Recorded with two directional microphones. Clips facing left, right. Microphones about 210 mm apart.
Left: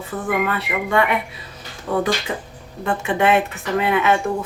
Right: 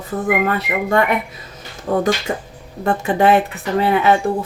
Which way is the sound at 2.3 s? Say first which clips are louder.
Right 3 dB; 45° right (ahead or behind).